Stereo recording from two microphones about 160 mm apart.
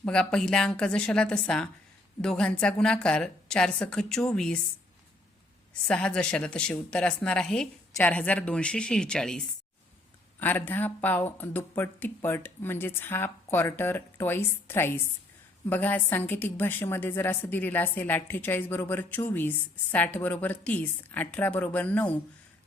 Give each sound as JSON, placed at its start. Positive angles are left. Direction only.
{"t": 0.0, "sound": "a woman's voice", "side_deg": 5}
{"t": 5.9, "sound": "a woman's voice", "side_deg": 5}